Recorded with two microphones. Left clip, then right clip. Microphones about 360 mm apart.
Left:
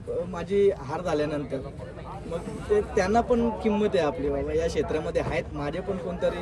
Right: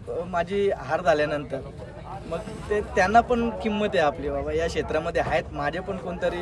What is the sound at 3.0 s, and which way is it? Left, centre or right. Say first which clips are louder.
Speech: right 8 dB; centre.